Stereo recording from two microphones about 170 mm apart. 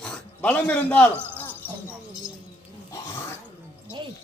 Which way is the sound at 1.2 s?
10° left (ahead or behind).